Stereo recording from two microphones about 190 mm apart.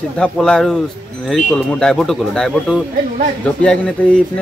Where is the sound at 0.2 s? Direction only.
5° left (ahead or behind).